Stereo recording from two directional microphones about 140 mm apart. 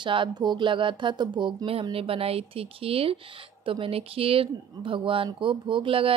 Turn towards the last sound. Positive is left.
turn(degrees=-40)  # may be behind; listen again after turning